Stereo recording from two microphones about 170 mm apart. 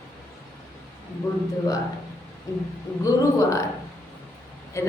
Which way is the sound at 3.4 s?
20° left (ahead or behind).